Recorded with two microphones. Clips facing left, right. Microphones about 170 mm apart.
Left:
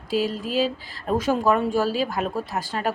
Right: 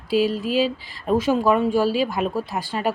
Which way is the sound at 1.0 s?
10° right (ahead or behind).